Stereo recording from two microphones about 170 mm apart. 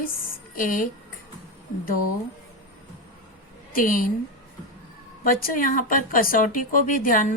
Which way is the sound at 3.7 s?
55° left (ahead or behind).